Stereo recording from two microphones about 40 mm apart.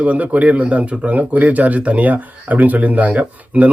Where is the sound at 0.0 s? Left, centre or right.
Right.